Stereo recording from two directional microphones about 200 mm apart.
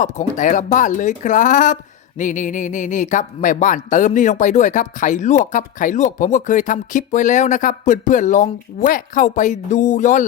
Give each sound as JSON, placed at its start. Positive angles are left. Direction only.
{"t": 0.0, "sound": "speech", "side_deg": 40}